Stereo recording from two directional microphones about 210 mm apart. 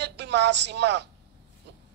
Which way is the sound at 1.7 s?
55° right (ahead or behind).